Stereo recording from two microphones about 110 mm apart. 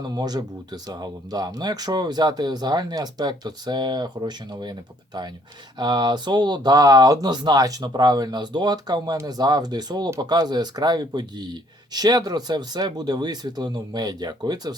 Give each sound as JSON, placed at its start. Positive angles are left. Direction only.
{"t": 0.1, "sound": "speech", "side_deg": -35}
{"t": 5.7, "sound": "speech", "side_deg": -40}